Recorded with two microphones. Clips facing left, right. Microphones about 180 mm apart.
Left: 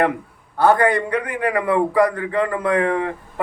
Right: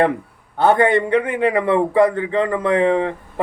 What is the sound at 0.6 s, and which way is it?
A man's voice, 25° right (ahead or behind).